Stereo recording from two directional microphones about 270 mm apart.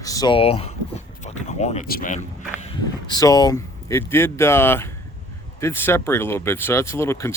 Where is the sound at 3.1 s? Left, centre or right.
Centre.